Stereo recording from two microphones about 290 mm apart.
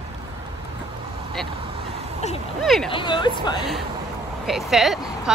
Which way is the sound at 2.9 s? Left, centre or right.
Centre.